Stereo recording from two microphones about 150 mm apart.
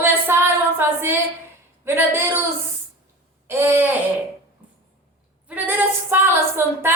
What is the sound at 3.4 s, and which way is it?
Speech, 15° right (ahead or behind).